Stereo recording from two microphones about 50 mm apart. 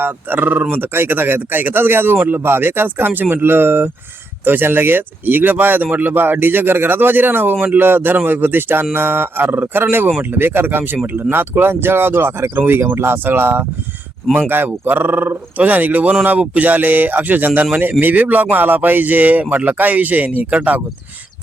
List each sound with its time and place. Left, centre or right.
0.0 s speech: right
11.6 s speech: right